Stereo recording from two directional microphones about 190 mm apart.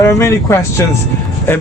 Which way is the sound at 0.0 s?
15° left (ahead or behind).